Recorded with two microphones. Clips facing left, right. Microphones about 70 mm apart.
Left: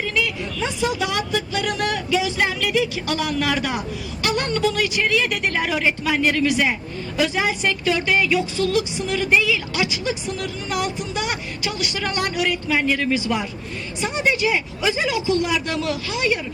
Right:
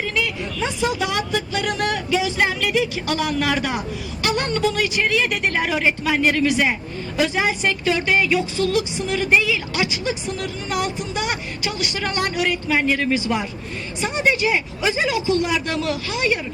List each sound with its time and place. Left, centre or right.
0.0 s a woman's voice: right